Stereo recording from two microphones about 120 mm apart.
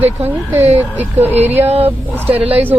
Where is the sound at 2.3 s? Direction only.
15° right (ahead or behind).